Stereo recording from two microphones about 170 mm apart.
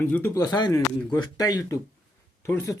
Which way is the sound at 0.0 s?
10° left (ahead or behind).